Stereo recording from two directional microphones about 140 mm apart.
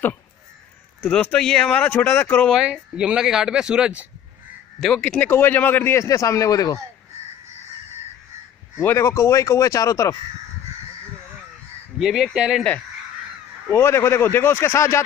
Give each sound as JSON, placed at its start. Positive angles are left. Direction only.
{"t": 1.0, "sound": "a man's voice", "side_deg": 10}
{"t": 2.5, "sound": "speech", "side_deg": -5}
{"t": 4.7, "sound": "a man's voice", "side_deg": 5}
{"t": 8.8, "sound": "speech", "side_deg": 20}
{"t": 12.0, "sound": "speech", "side_deg": -5}
{"t": 13.7, "sound": "a man's voice", "side_deg": 15}